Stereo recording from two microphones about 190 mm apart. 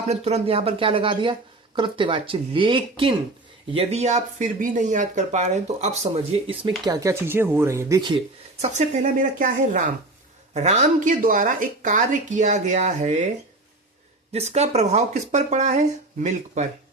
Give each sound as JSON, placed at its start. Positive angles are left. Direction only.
{"t": 0.1, "sound": "speech", "side_deg": -35}
{"t": 6.5, "sound": "speech", "side_deg": -25}
{"t": 8.6, "sound": "speech", "side_deg": -40}
{"t": 14.3, "sound": "speech", "side_deg": -35}